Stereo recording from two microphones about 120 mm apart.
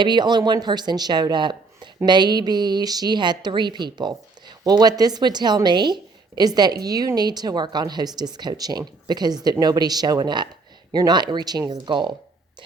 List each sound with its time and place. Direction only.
0.0 s a woman's voice: 40° right (ahead or behind)